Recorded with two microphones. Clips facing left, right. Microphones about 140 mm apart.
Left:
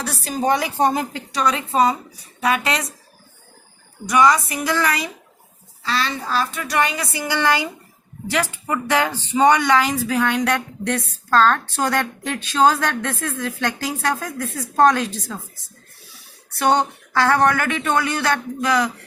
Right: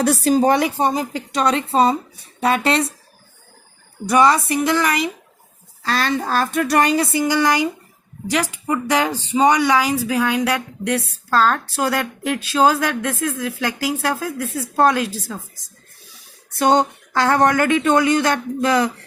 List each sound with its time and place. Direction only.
0.0 s a woman's voice: 45° right (ahead or behind)
0.3 s speech: 30° right (ahead or behind)
4.0 s speech: 30° right (ahead or behind)
5.8 s a woman's voice: 50° right (ahead or behind)
7.0 s speech: 20° right (ahead or behind)
16.6 s speech: 20° right (ahead or behind)